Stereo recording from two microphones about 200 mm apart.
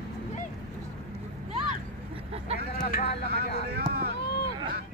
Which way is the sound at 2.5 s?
45° left (ahead or behind).